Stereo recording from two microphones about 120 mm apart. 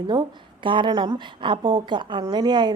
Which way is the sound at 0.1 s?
40° right (ahead or behind).